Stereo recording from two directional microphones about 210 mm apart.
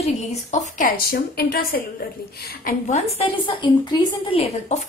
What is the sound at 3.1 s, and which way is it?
A woman's voice, 25° left (ahead or behind).